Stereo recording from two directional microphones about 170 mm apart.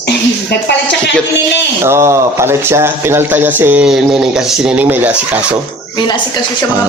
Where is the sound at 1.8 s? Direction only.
15° right (ahead or behind).